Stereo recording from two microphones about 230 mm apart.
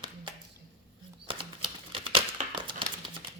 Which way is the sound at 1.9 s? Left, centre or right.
Right.